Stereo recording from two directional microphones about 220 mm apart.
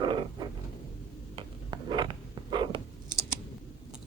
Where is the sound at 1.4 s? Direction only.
20° right (ahead or behind).